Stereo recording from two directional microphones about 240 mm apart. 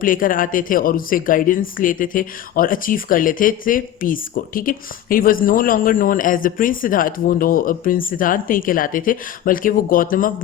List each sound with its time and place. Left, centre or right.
0.0 s speech: left